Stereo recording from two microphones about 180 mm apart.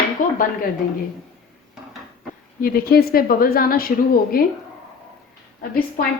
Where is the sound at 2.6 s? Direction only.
55° left (ahead or behind).